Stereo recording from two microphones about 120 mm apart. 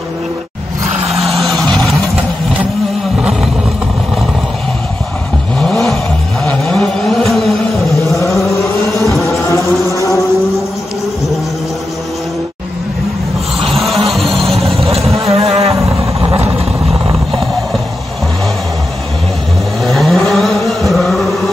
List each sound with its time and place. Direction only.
1.2 s vehicle: centre (ahead or behind)
3.2 s roar: 5° right (ahead or behind)
5.6 s vehicle: centre (ahead or behind)
8.4 s vehicle: 25° left (ahead or behind)
9.2 s a sound: 25° left (ahead or behind)
13.6 s music: centre (ahead or behind)
14.8 s vehicle: 55° right (ahead or behind)
15.1 s a sound: 55° right (ahead or behind)
15.7 s vehicle: 25° right (ahead or behind)
19.8 s vehicle: centre (ahead or behind)